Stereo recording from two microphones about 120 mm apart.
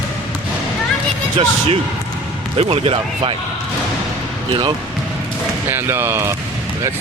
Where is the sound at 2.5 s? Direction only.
55° right (ahead or behind).